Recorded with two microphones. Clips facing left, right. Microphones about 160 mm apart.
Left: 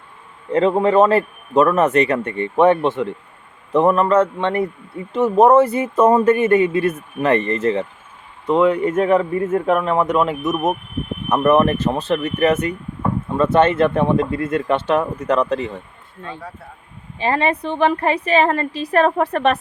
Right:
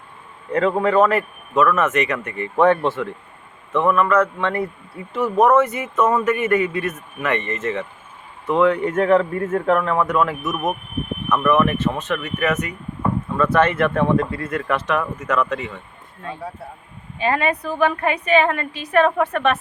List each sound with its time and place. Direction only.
0.5 s speech: 25° left (ahead or behind)
1.5 s a man's voice: 35° left (ahead or behind)
2.6 s speech: 20° left (ahead or behind)
3.7 s a man's voice: 35° left (ahead or behind)
8.4 s speech: 15° left (ahead or behind)
11.3 s a man's voice: 35° left (ahead or behind)
17.2 s a man's voice: 30° left (ahead or behind)